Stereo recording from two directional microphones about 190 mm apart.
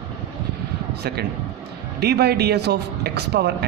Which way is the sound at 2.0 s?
55° right (ahead or behind).